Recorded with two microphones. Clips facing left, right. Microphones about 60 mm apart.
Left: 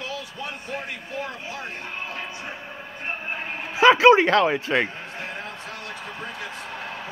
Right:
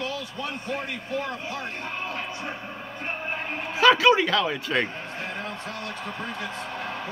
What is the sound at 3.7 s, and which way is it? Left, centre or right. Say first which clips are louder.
A man's voice: left 4 dB; left.